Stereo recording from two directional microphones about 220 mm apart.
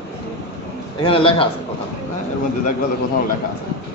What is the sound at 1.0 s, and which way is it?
Speech, 25° left (ahead or behind).